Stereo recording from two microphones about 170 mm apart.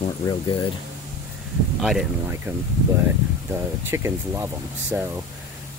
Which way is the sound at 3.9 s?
15° right (ahead or behind).